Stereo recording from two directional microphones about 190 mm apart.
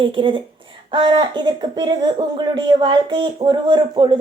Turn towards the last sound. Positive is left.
turn(degrees=-25)  # may be behind; listen again after turning